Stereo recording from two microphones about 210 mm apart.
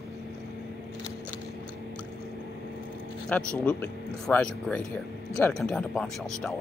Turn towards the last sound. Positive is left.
turn(degrees=0)  # may be behind; listen again after turning